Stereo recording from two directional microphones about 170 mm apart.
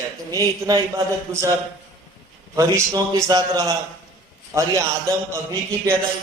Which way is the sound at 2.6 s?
20° right (ahead or behind).